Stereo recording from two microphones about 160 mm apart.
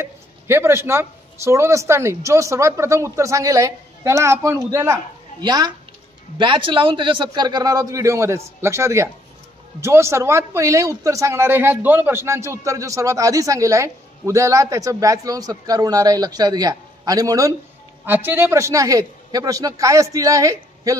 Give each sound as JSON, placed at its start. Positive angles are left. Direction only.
{"t": 0.0, "sound": "a man's voice", "side_deg": -15}